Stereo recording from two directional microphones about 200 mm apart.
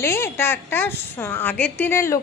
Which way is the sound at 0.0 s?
10° left (ahead or behind).